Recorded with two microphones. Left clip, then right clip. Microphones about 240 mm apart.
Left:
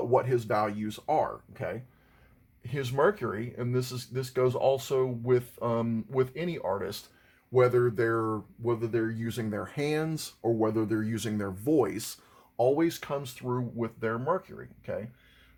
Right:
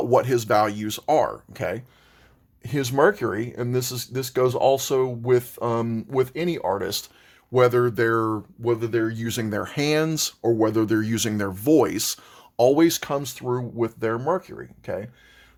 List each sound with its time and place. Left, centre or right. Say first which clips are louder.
0.1 s speech: right 7 dB; right